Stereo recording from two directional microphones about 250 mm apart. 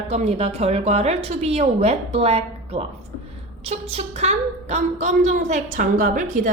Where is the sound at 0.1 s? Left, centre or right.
Right.